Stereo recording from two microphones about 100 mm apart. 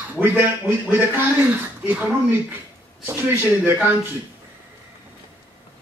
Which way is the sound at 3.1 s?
20° right (ahead or behind).